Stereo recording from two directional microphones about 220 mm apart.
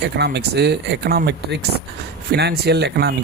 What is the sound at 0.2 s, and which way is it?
Speech, 50° right (ahead or behind).